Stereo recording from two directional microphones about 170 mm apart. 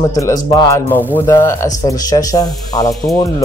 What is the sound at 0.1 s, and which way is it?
Speech, 20° left (ahead or behind).